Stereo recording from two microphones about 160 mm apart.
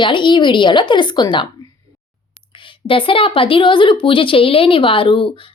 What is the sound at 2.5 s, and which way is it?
A woman's voice, 30° left (ahead or behind).